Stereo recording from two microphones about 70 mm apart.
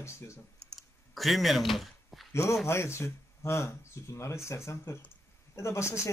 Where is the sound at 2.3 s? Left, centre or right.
Left.